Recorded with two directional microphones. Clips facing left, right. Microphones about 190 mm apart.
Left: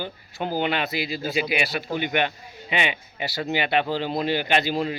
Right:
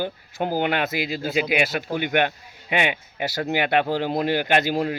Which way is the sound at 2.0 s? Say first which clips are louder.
Right 4 dB; 55° right (ahead or behind).